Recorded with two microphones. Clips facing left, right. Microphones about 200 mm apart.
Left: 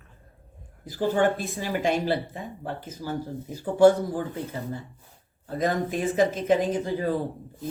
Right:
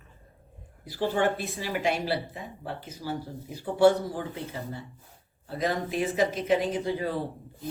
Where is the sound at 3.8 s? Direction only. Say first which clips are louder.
Left 3 dB; 45° left (ahead or behind).